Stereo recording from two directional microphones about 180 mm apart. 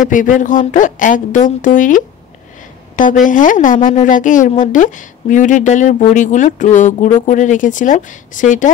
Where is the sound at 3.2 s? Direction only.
45° left (ahead or behind).